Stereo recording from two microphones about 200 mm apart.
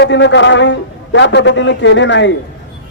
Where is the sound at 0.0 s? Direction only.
60° left (ahead or behind).